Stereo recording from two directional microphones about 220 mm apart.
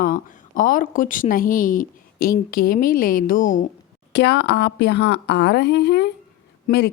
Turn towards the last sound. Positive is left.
turn(degrees=50)  # may be behind; listen again after turning